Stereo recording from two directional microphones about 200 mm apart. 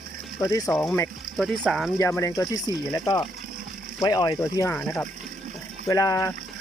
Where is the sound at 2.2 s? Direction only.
15° left (ahead or behind).